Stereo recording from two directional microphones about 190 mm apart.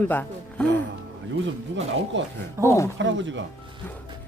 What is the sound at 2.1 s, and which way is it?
Speech, 75° right (ahead or behind).